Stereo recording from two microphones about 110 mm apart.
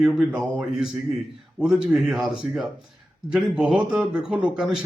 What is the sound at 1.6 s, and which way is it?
A man's voice, 5° right (ahead or behind).